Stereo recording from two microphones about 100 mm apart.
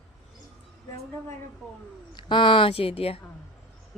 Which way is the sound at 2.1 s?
55° left (ahead or behind).